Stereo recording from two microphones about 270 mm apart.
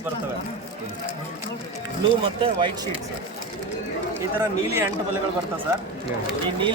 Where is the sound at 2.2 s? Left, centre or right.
Centre.